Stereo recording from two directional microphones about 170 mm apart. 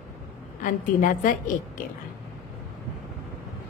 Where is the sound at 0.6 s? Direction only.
50° left (ahead or behind).